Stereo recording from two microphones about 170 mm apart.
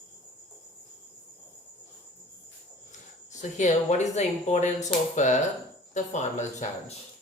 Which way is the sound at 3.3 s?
45° left (ahead or behind).